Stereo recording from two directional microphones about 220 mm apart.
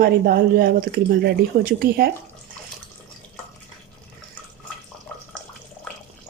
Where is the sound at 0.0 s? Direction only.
45° right (ahead or behind).